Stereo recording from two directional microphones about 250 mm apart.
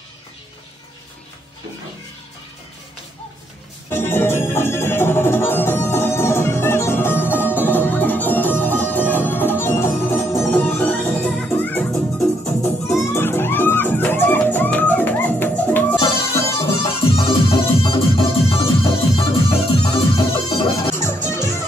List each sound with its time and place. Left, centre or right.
3.9 s music: centre
16.3 s music: left